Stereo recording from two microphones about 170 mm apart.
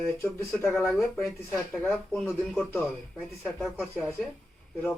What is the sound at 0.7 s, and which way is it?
Speech, 15° left (ahead or behind).